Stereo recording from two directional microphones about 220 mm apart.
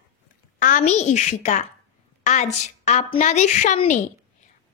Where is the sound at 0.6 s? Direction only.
35° left (ahead or behind).